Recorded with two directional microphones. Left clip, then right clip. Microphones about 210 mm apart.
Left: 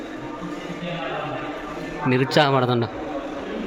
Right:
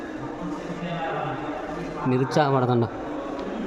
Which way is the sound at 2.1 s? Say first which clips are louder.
Left 4 dB; 5° right (ahead or behind).